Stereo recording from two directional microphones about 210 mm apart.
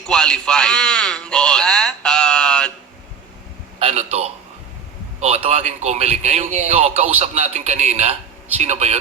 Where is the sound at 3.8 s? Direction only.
30° right (ahead or behind).